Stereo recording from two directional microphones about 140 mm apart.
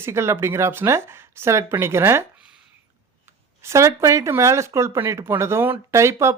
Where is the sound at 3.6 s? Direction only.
20° right (ahead or behind).